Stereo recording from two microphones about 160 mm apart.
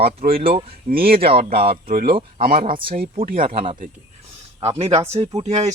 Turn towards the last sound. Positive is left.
turn(degrees=-45)  # may be behind; listen again after turning